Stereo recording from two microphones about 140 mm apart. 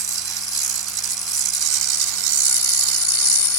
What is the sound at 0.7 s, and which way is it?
Rattle, 25° left (ahead or behind).